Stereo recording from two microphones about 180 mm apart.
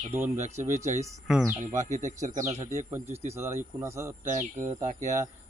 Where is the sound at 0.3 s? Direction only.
40° right (ahead or behind).